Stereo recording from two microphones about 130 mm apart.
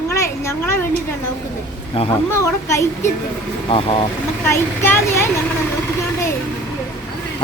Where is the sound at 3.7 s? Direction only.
45° left (ahead or behind).